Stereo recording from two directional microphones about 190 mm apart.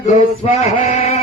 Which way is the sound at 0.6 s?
40° left (ahead or behind).